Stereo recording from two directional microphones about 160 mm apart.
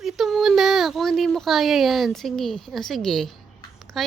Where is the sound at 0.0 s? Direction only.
Centre (ahead or behind).